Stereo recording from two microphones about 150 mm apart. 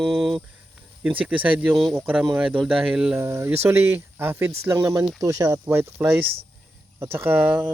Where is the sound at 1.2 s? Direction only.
10° right (ahead or behind).